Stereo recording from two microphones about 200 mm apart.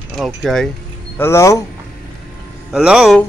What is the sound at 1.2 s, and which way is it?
Speech, 15° left (ahead or behind).